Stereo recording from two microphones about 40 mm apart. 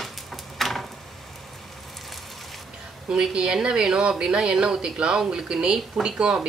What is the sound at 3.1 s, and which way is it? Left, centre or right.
Speech, centre.